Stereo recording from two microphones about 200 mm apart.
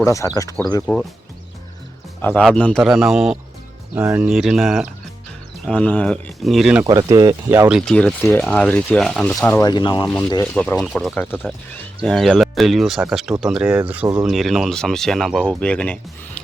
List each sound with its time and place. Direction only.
0.0 s speech: 15° left (ahead or behind)
2.4 s speech: 5° left (ahead or behind)
6.8 s speech: 15° right (ahead or behind)
7.8 s speech: 5° left (ahead or behind)
9.4 s speech: 15° left (ahead or behind)
10.4 s speech: 5° left (ahead or behind)